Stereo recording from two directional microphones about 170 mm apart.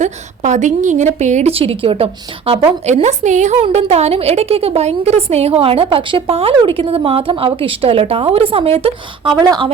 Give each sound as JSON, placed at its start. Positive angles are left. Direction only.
{"t": 0.0, "sound": "a woman's voice", "side_deg": -45}
{"t": 2.8, "sound": "a woman's voice", "side_deg": -40}
{"t": 9.4, "sound": "speech", "side_deg": -25}